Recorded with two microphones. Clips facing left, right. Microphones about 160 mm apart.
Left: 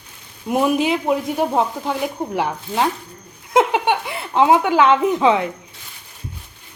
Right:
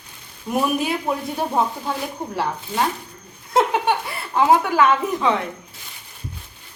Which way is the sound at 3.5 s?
20° left (ahead or behind).